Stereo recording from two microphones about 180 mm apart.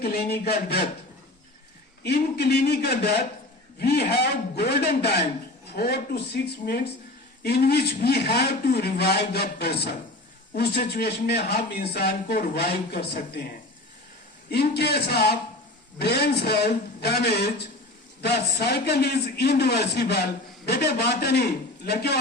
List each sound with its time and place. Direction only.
0.0 s a man's voice: 60° left (ahead or behind)
2.0 s a man's voice: 65° left (ahead or behind)
14.5 s a man's voice: 65° left (ahead or behind)